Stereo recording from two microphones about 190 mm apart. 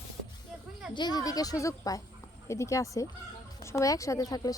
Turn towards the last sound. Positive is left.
turn(degrees=20)  # may be behind; listen again after turning